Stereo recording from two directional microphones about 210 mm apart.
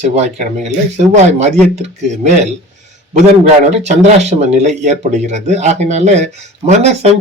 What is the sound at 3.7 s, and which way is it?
Speech, 30° right (ahead or behind).